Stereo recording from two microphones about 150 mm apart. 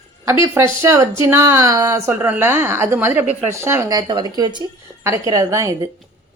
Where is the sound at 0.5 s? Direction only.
20° right (ahead or behind).